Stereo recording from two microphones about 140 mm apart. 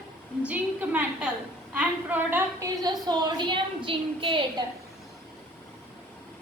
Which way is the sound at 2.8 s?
30° right (ahead or behind).